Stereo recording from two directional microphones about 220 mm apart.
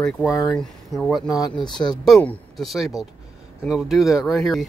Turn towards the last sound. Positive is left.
turn(degrees=0)  # may be behind; listen again after turning